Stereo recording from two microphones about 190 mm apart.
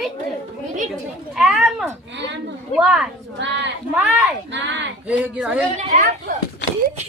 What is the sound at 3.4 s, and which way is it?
Speech, 70° right (ahead or behind).